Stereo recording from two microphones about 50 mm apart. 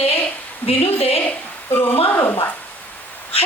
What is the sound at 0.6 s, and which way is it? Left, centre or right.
Speech, left.